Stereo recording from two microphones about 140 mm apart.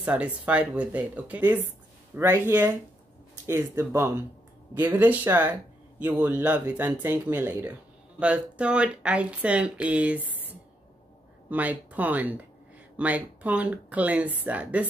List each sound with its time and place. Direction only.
0.0 s speech: 10° right (ahead or behind)
11.4 s speech: 10° right (ahead or behind)